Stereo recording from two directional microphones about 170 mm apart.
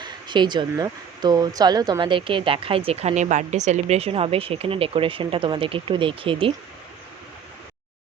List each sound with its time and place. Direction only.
0.0 s speech: 25° right (ahead or behind)